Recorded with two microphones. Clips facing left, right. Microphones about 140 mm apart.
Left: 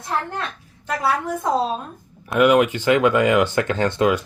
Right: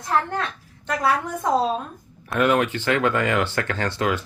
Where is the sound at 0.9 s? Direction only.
Centre (ahead or behind).